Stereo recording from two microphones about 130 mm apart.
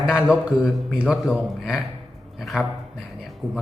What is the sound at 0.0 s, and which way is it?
A man's voice, 5° right (ahead or behind).